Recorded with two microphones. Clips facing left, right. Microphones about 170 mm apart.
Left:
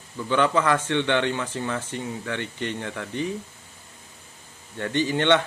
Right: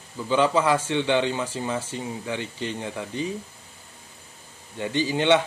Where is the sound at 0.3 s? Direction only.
10° right (ahead or behind).